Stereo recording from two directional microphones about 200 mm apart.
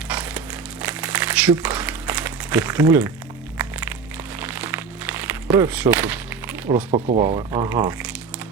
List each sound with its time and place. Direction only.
0.1 s crumpling: 5° right (ahead or behind)
3.6 s music: 10° right (ahead or behind)
6.9 s speech: 30° right (ahead or behind)